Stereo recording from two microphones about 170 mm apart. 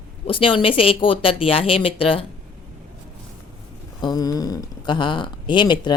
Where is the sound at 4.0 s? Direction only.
20° left (ahead or behind).